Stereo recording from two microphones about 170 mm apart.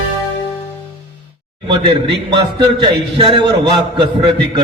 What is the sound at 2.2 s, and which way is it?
A man's voice, 30° right (ahead or behind).